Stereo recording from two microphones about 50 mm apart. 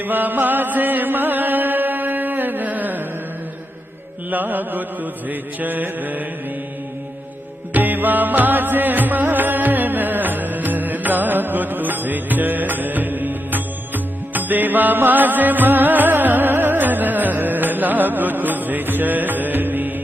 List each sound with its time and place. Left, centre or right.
0.0 s music: right
4.3 s mantra: right
7.7 s music: right